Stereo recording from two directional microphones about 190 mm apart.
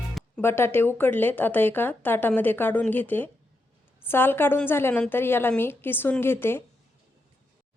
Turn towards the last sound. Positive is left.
turn(degrees=10)  # may be behind; listen again after turning